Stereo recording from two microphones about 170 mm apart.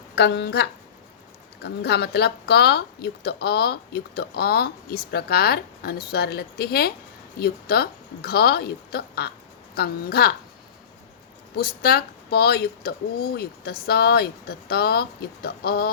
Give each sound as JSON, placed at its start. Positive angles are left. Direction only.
{"t": 0.2, "sound": "a woman's voice", "side_deg": 80}
{"t": 11.5, "sound": "speech", "side_deg": 65}